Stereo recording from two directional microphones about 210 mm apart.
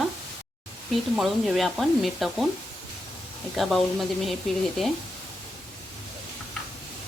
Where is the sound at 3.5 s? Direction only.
Centre (ahead or behind).